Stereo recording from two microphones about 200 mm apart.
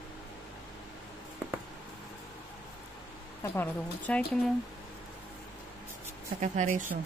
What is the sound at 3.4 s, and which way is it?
Speech, 10° left (ahead or behind).